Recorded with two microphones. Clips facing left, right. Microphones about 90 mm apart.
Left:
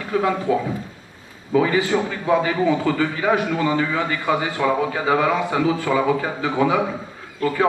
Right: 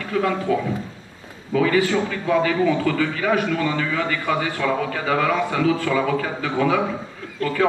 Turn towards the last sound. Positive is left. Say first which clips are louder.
# left 1 dB
turn(degrees=20)  # may be behind; listen again after turning